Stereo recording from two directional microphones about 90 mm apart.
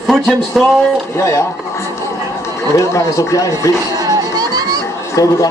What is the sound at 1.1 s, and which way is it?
Speech, 30° left (ahead or behind).